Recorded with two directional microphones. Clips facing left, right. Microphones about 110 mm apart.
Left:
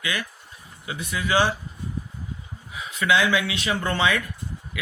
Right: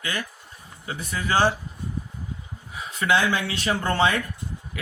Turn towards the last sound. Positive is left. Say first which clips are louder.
# right 1 dB
turn(degrees=-40)  # may be behind; listen again after turning